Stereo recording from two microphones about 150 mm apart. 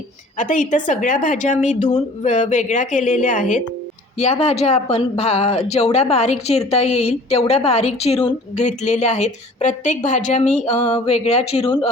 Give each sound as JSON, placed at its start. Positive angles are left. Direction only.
{"t": 0.3, "sound": "a woman's voice", "side_deg": 55}
{"t": 4.2, "sound": "speech", "side_deg": 45}